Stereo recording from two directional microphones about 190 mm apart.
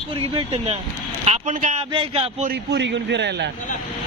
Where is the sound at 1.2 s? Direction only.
40° right (ahead or behind).